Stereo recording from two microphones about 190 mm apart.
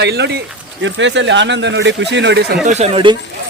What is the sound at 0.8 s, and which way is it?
Speech, 70° right (ahead or behind).